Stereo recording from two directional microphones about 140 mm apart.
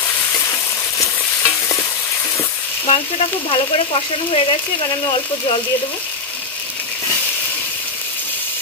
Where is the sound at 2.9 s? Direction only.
40° left (ahead or behind).